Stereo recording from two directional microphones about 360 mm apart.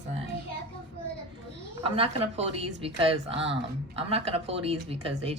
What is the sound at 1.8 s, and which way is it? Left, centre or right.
A woman's voice, centre.